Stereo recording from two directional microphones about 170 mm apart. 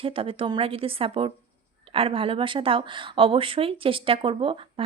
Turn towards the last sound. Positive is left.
turn(degrees=-30)  # may be behind; listen again after turning